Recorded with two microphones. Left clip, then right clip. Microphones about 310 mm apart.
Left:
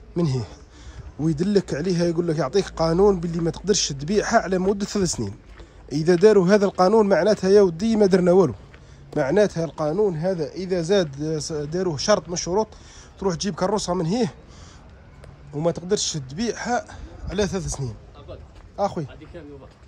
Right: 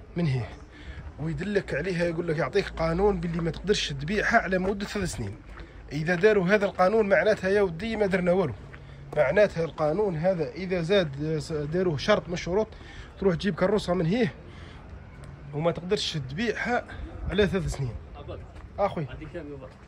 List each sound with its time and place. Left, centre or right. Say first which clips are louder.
0.1 s a man's voice: left 6 dB; centre
15.6 s a man's voice: left 4 dB; centre